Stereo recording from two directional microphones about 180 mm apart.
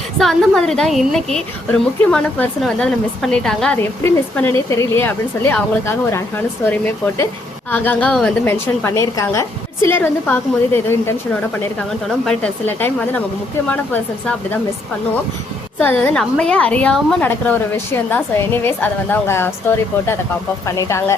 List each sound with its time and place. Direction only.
0.2 s a woman's voice: centre (ahead or behind)
12.0 s a woman's voice: 5° left (ahead or behind)
15.8 s a woman's voice: 10° left (ahead or behind)